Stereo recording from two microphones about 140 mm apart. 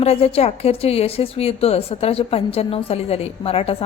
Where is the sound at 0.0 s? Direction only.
50° left (ahead or behind).